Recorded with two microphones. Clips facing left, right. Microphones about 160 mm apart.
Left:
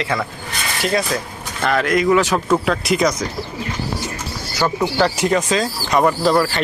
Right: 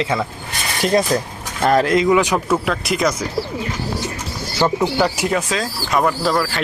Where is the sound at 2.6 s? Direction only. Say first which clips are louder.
Left 2 dB; centre (ahead or behind).